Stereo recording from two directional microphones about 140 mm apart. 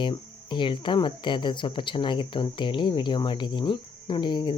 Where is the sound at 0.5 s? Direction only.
35° left (ahead or behind).